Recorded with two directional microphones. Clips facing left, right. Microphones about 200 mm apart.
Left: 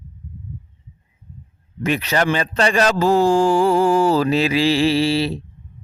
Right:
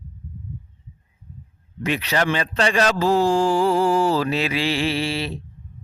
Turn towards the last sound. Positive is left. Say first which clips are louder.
# left 7 dB
turn(degrees=35)  # may be behind; listen again after turning